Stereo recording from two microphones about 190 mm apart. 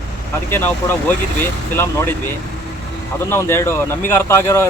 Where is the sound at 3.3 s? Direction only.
15° left (ahead or behind).